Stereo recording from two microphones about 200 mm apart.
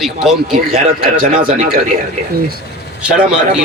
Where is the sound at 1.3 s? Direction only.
45° right (ahead or behind).